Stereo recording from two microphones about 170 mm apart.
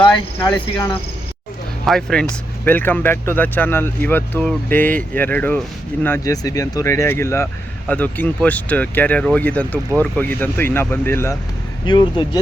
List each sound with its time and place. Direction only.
0.3 s cricket: 20° left (ahead or behind)
1.9 s speech: 5° left (ahead or behind)
11.9 s cricket: 25° left (ahead or behind)